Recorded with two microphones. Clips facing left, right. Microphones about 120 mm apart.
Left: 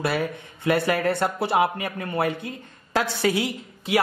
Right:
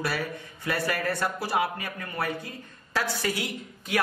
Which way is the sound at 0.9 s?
25° left (ahead or behind).